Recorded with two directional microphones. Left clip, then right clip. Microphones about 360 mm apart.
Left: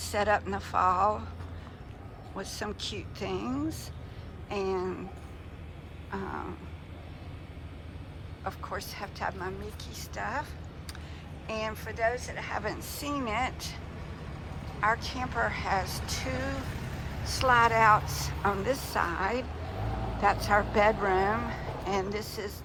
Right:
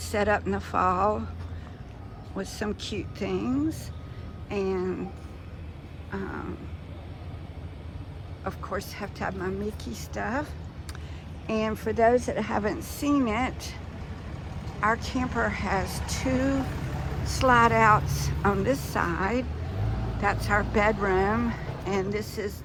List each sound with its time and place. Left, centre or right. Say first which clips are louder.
0.1 s speech: right 2 dB; centre
2.4 s speech: right 3 dB; centre
6.1 s speech: right 1 dB; centre
8.4 s speech: right 3 dB; centre
14.8 s speech: right 2 dB; centre
21.6 s a sound: even; left
21.8 s speech: right 3 dB; centre